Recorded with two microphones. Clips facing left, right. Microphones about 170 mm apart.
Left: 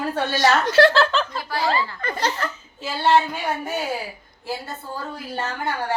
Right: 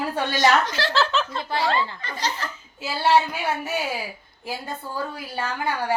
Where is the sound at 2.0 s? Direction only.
55° left (ahead or behind).